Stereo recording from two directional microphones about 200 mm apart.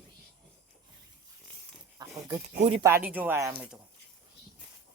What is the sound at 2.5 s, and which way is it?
Speech, 35° right (ahead or behind).